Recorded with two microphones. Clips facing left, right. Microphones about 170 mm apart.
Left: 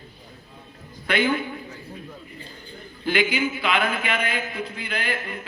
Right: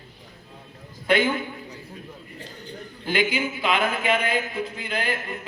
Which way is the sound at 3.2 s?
45° right (ahead or behind).